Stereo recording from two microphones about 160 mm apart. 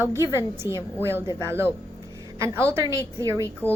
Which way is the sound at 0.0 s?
20° right (ahead or behind).